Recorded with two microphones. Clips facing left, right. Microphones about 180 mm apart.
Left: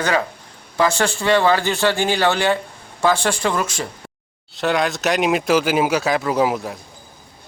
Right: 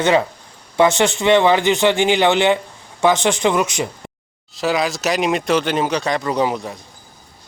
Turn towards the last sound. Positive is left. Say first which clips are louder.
# left 1 dB
turn(degrees=5)  # may be behind; listen again after turning